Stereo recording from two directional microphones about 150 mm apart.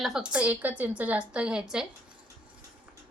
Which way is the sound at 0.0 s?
5° right (ahead or behind).